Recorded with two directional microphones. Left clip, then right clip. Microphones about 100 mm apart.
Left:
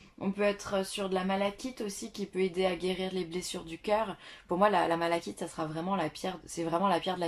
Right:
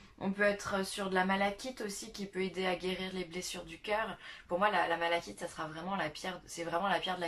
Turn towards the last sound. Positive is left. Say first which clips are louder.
# left 4 dB
turn(degrees=40)  # may be behind; listen again after turning